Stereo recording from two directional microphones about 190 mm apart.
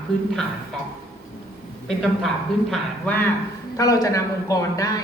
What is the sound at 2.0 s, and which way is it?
Speech, centre (ahead or behind).